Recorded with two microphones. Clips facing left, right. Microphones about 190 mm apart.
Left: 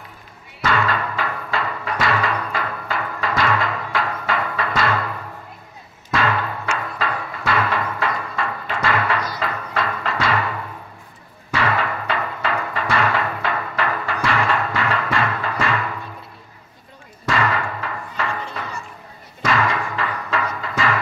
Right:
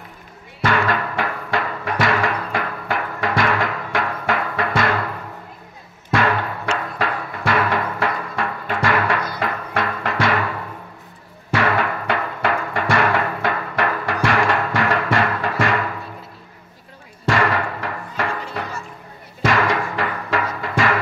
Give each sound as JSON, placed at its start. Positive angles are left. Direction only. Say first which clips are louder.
{"t": 0.7, "sound": "music", "louder": "right 1 dB", "side_deg": -50}
{"t": 6.1, "sound": "music", "louder": "right 2 dB", "side_deg": -55}
{"t": 11.5, "sound": "music", "louder": "right 2 dB", "side_deg": -50}
{"t": 17.3, "sound": "music", "louder": "right 2 dB", "side_deg": -55}